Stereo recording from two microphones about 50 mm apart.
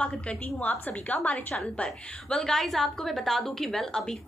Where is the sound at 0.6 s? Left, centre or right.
Left.